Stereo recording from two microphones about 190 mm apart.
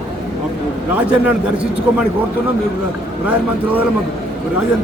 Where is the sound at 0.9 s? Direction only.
5° right (ahead or behind).